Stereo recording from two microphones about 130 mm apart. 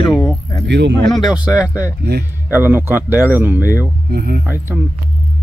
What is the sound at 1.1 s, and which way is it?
Speech, 5° right (ahead or behind).